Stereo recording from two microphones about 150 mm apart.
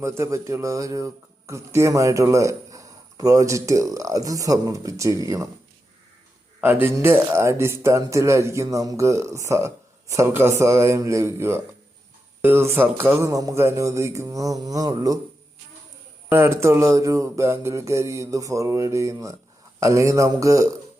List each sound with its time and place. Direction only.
0.0 s speech: 20° right (ahead or behind)
6.6 s speech: 15° right (ahead or behind)
16.3 s speech: 15° right (ahead or behind)